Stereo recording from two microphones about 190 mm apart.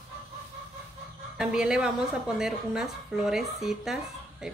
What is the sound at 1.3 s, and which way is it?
A woman's voice, 5° right (ahead or behind).